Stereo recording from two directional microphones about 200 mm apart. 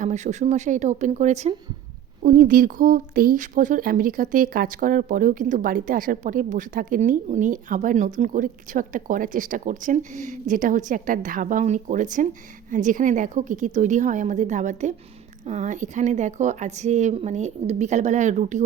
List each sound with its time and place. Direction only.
0.0 s a woman's voice: 35° right (ahead or behind)
2.2 s a woman's voice: 45° right (ahead or behind)